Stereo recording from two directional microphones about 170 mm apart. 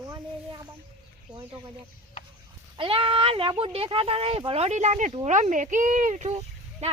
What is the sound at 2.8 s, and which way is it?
Speech, 30° right (ahead or behind).